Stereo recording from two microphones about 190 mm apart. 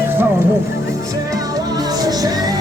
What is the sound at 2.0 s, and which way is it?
Music, 20° right (ahead or behind).